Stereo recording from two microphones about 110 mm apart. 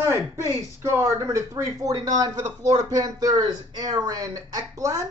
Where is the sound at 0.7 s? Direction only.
25° right (ahead or behind).